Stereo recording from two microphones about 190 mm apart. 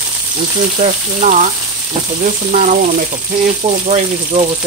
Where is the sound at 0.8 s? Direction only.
40° right (ahead or behind).